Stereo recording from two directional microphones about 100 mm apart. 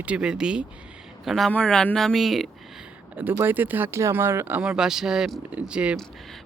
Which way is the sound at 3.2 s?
20° right (ahead or behind).